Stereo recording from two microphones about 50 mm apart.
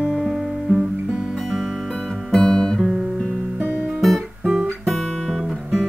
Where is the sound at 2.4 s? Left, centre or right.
Centre.